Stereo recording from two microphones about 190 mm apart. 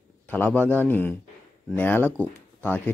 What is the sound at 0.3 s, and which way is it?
Speech, 10° left (ahead or behind).